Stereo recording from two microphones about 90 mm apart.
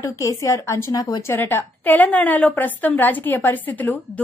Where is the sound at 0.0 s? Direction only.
40° left (ahead or behind).